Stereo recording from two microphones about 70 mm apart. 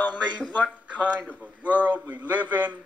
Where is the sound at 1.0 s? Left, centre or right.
Right.